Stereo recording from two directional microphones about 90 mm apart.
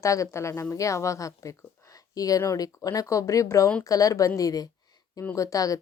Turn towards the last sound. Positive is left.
turn(degrees=40)  # may be behind; listen again after turning